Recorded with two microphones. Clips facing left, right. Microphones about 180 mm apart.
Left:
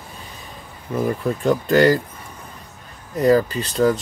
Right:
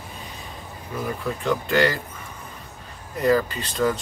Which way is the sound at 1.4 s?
40° left (ahead or behind).